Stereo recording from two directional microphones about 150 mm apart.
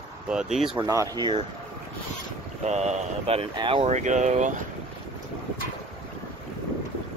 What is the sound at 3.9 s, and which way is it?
Speech, 55° right (ahead or behind).